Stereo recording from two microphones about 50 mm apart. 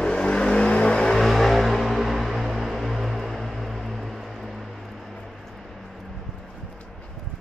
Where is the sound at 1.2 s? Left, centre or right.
Centre.